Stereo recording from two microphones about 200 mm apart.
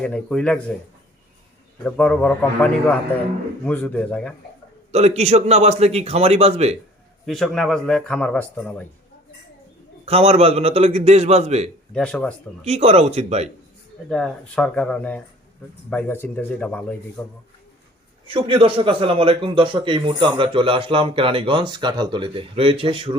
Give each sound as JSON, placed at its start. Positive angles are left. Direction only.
{"t": 0.0, "sound": "speech", "side_deg": 5}
{"t": 1.8, "sound": "a man's voice", "side_deg": 5}
{"t": 4.9, "sound": "a man's voice", "side_deg": -35}
{"t": 7.3, "sound": "speech", "side_deg": 0}
{"t": 10.1, "sound": "a man's voice", "side_deg": -30}
{"t": 11.9, "sound": "speech", "side_deg": 5}
{"t": 12.6, "sound": "a man's voice", "side_deg": -30}
{"t": 14.1, "sound": "a man's voice", "side_deg": 5}
{"t": 18.3, "sound": "a man's voice", "side_deg": -25}